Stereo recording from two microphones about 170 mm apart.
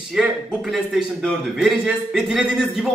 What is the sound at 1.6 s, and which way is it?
A man's voice, centre (ahead or behind).